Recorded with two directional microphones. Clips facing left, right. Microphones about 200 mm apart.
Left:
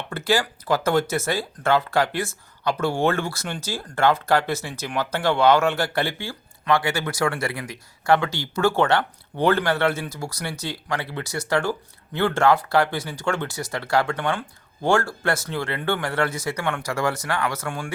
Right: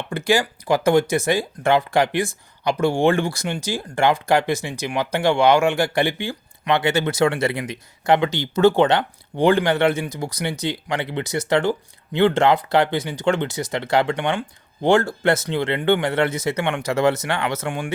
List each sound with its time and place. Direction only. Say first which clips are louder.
0.1 s speech: right 3 dB; 15° right (ahead or behind)